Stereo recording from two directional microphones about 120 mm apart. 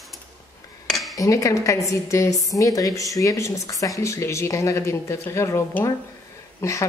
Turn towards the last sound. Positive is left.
turn(degrees=20)  # may be behind; listen again after turning